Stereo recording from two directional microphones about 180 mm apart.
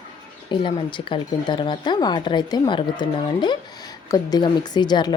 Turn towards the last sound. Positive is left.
turn(degrees=25)  # may be behind; listen again after turning